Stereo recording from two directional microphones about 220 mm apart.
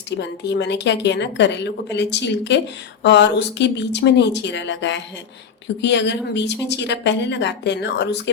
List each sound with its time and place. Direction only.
0.2 s a woman's voice: 50° left (ahead or behind)